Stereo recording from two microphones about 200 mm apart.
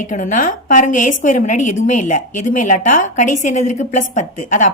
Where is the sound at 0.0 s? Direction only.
40° left (ahead or behind).